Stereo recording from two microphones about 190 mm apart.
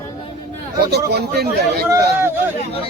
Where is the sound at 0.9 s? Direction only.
60° right (ahead or behind).